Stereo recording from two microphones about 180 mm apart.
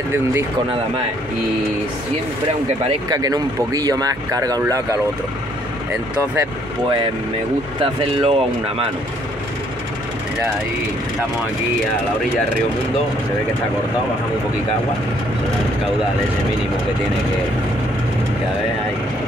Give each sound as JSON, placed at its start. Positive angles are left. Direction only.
{"t": 0.1, "sound": "speech", "side_deg": -15}
{"t": 3.1, "sound": "speech", "side_deg": -20}
{"t": 7.8, "sound": "speech", "side_deg": -30}